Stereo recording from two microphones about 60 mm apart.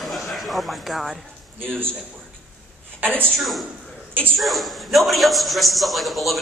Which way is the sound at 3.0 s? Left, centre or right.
Right.